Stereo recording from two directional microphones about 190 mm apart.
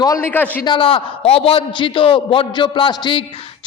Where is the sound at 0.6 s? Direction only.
25° left (ahead or behind).